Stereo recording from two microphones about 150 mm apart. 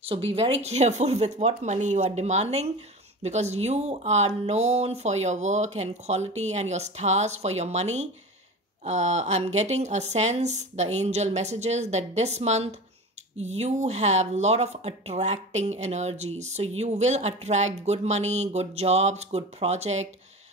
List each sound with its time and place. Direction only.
0.0 s speech: 40° right (ahead or behind)